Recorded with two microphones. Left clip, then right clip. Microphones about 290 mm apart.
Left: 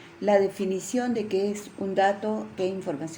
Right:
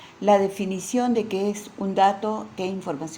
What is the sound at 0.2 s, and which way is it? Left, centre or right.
A woman's voice, centre.